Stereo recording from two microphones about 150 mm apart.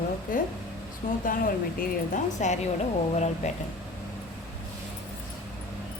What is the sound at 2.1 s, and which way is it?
Speech, 50° left (ahead or behind).